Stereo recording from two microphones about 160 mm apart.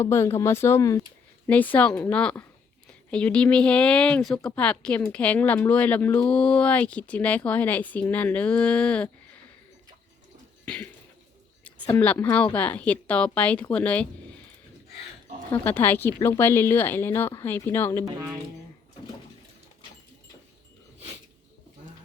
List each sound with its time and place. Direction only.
0.0 s speech: 15° left (ahead or behind)
1.5 s speech: 10° left (ahead or behind)
11.6 s speech: 10° left (ahead or behind)
15.4 s speech: 10° left (ahead or behind)
18.0 s speech: 20° right (ahead or behind)